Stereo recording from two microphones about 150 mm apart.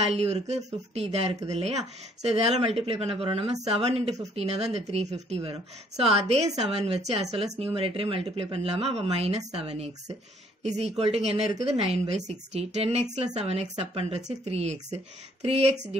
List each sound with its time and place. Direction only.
0.0 s a woman's voice: 45° right (ahead or behind)